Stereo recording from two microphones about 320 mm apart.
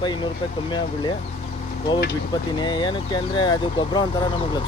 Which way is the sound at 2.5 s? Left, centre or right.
Centre.